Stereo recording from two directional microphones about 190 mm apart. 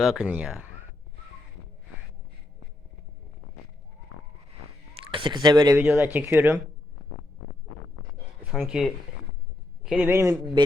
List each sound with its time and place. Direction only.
0.0 s speech: centre (ahead or behind)
5.1 s speech: 25° right (ahead or behind)
5.8 s speech: 10° right (ahead or behind)
8.4 s speech: centre (ahead or behind)